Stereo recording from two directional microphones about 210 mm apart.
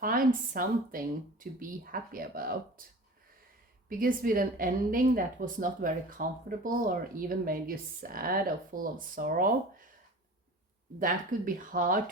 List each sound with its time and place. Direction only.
0.0 s a woman's voice: 40° right (ahead or behind)
3.8 s a woman's voice: 45° right (ahead or behind)
11.0 s speech: 40° right (ahead or behind)